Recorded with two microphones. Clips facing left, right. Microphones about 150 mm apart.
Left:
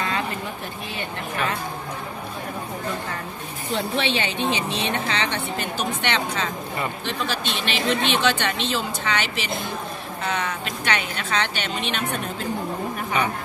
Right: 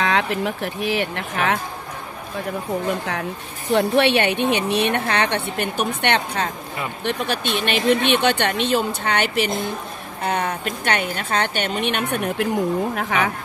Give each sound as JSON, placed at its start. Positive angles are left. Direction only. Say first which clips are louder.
{"t": 0.0, "sound": "speech", "louder": "right 6 dB", "side_deg": -75}
{"t": 3.7, "sound": "a woman's voice", "louder": "right 8 dB", "side_deg": -60}
{"t": 12.9, "sound": "speech", "louder": "right 3 dB", "side_deg": -90}